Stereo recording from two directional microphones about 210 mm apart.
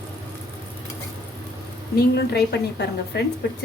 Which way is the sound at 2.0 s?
50° left (ahead or behind).